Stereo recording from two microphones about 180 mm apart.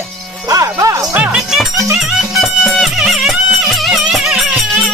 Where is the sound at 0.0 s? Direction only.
20° right (ahead or behind).